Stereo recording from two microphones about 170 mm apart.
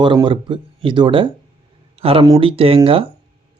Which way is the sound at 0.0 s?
30° right (ahead or behind).